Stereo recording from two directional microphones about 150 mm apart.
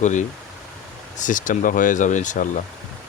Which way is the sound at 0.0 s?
55° left (ahead or behind).